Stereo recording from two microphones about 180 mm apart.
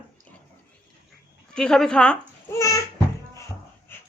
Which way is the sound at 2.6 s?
15° left (ahead or behind).